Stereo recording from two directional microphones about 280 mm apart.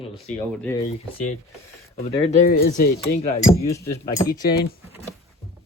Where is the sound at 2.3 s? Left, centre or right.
Left.